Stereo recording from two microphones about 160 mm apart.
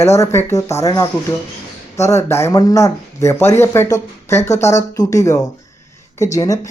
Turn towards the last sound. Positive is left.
turn(degrees=20)  # may be behind; listen again after turning